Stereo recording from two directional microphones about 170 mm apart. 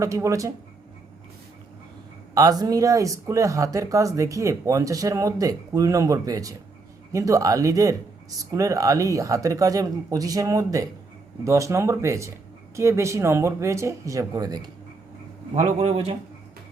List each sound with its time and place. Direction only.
0.0 s speech: 15° right (ahead or behind)
2.3 s speech: 20° right (ahead or behind)
15.5 s a man's voice: 35° right (ahead or behind)